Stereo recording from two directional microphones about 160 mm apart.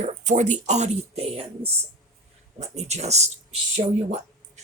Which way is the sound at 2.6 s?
45° right (ahead or behind).